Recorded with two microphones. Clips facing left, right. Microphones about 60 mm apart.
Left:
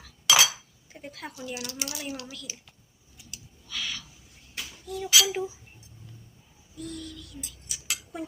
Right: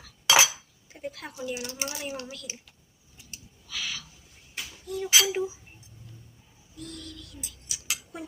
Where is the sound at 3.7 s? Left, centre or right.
Centre.